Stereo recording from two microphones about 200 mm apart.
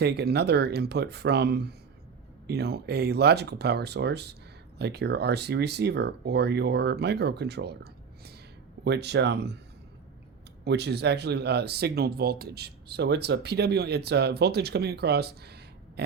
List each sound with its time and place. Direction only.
0.0 s speech: 55° right (ahead or behind)
8.8 s speech: 55° right (ahead or behind)
10.6 s speech: 55° right (ahead or behind)